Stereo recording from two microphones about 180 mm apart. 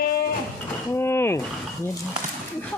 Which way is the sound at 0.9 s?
15° left (ahead or behind).